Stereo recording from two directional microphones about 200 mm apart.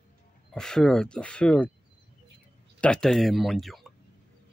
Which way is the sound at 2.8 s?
5° left (ahead or behind).